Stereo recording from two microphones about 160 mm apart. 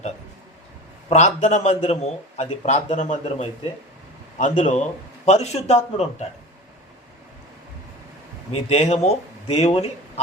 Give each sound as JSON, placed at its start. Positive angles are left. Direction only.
{"t": 1.1, "sound": "a man's voice", "side_deg": 45}
{"t": 8.7, "sound": "speech", "side_deg": 45}